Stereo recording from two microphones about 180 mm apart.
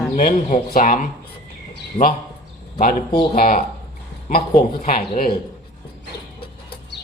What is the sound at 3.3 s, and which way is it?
Speech, 50° left (ahead or behind).